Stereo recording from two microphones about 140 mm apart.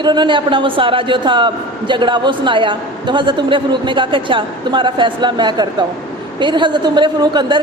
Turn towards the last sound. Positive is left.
turn(degrees=-30)  # may be behind; listen again after turning